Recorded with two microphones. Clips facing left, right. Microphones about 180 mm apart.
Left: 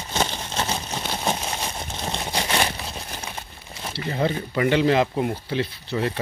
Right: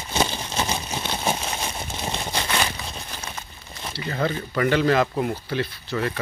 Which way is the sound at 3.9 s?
20° left (ahead or behind).